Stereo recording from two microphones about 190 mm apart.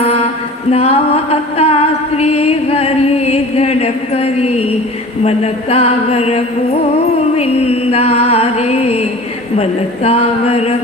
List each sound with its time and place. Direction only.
0.0 s mantra: 30° left (ahead or behind)
0.7 s music: 30° left (ahead or behind)